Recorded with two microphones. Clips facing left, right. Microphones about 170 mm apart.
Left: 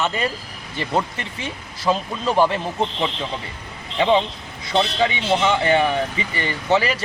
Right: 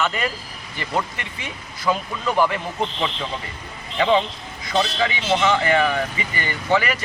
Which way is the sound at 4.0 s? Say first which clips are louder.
Left 1 dB; 20° left (ahead or behind).